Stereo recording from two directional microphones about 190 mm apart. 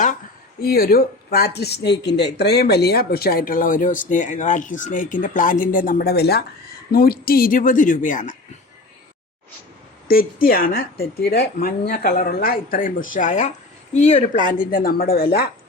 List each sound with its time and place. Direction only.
0.6 s speech: 50° left (ahead or behind)
10.4 s speech: 50° left (ahead or behind); by 14.4 s 35° left (ahead or behind)
14.4 s speech: 45° left (ahead or behind)